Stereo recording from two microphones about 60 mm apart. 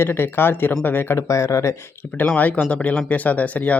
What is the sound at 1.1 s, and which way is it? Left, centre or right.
Speech, left.